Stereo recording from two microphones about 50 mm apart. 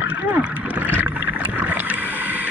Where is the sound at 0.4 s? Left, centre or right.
Right.